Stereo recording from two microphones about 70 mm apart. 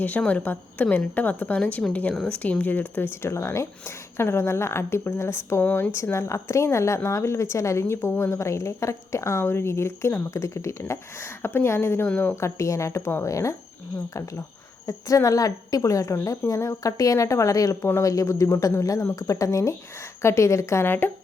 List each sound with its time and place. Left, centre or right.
0.2 s a woman's voice: centre; by 12.0 s left
12.0 s a woman's voice: left
12.4 s a woman's voice: left
14.8 s a woman's voice: left
20.8 s speech: left